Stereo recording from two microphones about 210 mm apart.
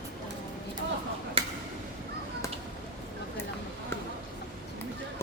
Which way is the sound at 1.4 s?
25° right (ahead or behind).